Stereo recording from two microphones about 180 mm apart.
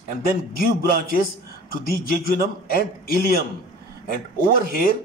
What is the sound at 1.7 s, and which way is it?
Speech, 55° left (ahead or behind).